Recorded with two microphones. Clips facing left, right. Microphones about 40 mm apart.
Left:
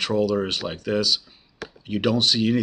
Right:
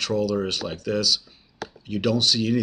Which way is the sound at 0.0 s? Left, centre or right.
Centre.